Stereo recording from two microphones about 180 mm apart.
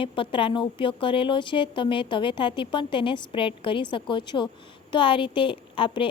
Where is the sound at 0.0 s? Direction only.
30° left (ahead or behind).